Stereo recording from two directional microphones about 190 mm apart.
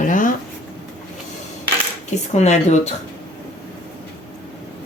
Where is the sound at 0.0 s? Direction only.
45° left (ahead or behind).